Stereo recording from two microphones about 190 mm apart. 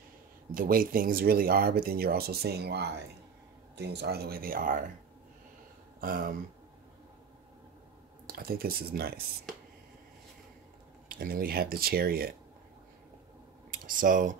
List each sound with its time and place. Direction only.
0.6 s speech: 50° right (ahead or behind)
5.9 s speech: 50° right (ahead or behind)
8.3 s speech: 50° right (ahead or behind)
11.1 s speech: 50° right (ahead or behind)
13.7 s speech: 45° right (ahead or behind)